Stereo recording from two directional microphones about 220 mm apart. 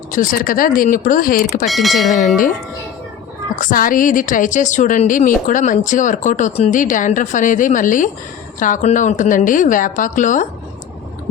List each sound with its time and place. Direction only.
0.1 s a woman's voice: 35° left (ahead or behind)
1.6 s speech: centre (ahead or behind)
3.5 s a woman's voice: 35° left (ahead or behind)